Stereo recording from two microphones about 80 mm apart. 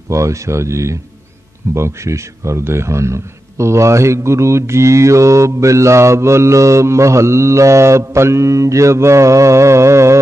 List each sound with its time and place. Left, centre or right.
0.1 s a man's voice: right